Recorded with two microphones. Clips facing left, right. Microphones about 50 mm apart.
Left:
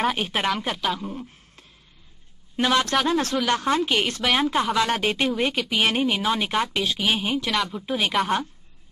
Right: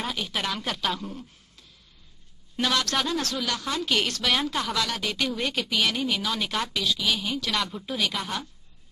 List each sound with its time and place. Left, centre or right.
0.1 s speech: left
0.7 s speech: centre
2.5 s a woman's voice: left
3.9 s speech: left
7.5 s a woman's voice: centre